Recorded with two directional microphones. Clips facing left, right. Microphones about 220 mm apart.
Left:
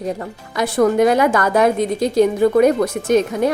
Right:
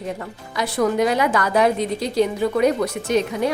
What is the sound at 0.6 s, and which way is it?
A woman's voice, 50° left (ahead or behind).